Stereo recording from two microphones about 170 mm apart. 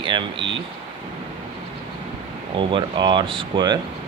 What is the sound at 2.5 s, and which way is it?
Speech, 30° right (ahead or behind).